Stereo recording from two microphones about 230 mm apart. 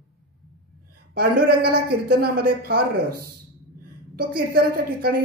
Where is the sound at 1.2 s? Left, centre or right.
Right.